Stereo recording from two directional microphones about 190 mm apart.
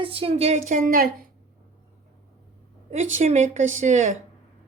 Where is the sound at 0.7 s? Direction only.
50° right (ahead or behind).